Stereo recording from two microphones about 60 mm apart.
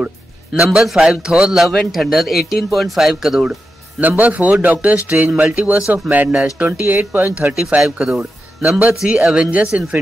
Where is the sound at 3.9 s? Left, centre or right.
Right.